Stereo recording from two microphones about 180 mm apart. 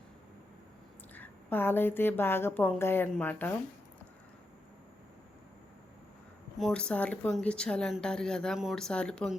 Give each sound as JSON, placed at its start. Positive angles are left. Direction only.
{"t": 1.1, "sound": "a woman's voice", "side_deg": 10}
{"t": 6.6, "sound": "a woman's voice", "side_deg": 5}